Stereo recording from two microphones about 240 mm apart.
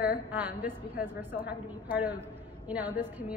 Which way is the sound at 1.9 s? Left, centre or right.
Centre.